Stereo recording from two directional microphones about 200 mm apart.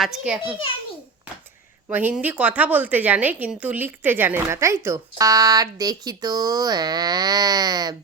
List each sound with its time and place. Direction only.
0.0 s a child's voice: centre (ahead or behind)
1.9 s a woman's voice: 10° right (ahead or behind)